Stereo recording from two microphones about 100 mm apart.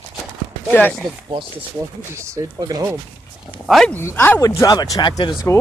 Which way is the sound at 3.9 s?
20° left (ahead or behind).